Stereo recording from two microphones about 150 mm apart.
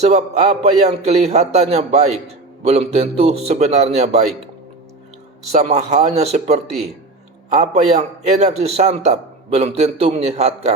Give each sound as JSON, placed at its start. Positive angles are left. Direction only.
{"t": 0.0, "sound": "a man's voice", "side_deg": -45}
{"t": 5.5, "sound": "a man's voice", "side_deg": -45}